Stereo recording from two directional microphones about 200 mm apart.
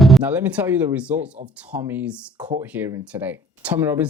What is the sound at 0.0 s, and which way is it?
Speech, 5° right (ahead or behind).